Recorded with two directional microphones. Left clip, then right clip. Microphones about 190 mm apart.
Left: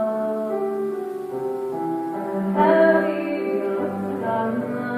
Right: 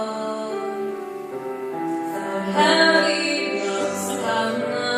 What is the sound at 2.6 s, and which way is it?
Music, 30° right (ahead or behind).